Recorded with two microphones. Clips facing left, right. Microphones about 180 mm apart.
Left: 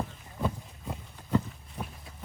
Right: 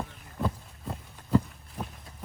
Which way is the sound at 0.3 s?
Centre (ahead or behind).